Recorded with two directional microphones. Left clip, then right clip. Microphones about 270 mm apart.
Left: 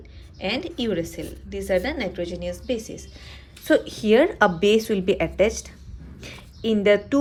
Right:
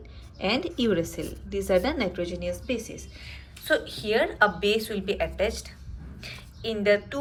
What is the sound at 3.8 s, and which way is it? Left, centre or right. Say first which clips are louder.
Speech: left 7 dB; left.